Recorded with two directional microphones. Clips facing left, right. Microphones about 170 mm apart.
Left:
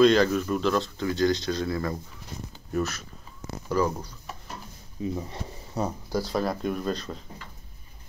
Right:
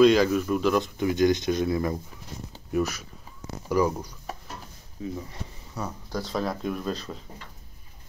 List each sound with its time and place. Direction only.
0.0 s speech: 10° right (ahead or behind)
5.0 s speech: 25° left (ahead or behind)
6.0 s speech: 5° left (ahead or behind)